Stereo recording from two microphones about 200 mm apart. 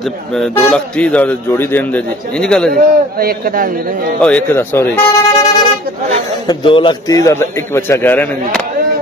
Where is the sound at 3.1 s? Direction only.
50° right (ahead or behind).